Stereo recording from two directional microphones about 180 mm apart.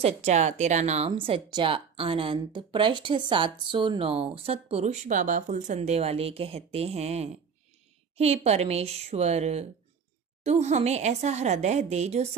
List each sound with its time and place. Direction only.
0.0 s speech: 40° right (ahead or behind)